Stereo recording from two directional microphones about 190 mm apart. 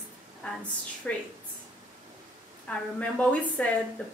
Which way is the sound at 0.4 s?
5° left (ahead or behind).